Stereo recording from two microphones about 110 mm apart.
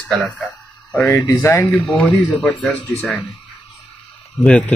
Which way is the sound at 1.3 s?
20° left (ahead or behind).